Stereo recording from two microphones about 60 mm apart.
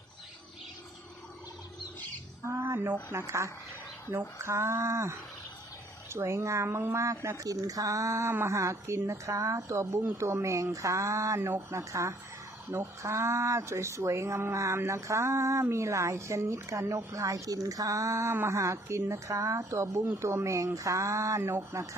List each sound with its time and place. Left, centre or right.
2.5 s speech: right
3.2 s speech: right
10.0 s speech: right
11.8 s speech: right
17.1 s speech: right
21.7 s speech: right